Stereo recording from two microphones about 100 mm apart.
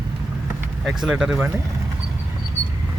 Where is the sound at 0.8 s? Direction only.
5° right (ahead or behind).